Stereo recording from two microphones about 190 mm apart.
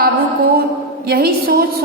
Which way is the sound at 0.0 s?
55° right (ahead or behind).